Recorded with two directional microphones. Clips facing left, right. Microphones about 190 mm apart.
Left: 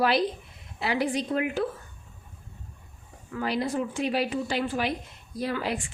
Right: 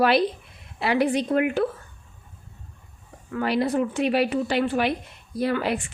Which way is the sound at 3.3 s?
65° right (ahead or behind).